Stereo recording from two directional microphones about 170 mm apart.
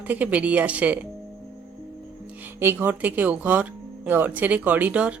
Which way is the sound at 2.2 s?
10° right (ahead or behind).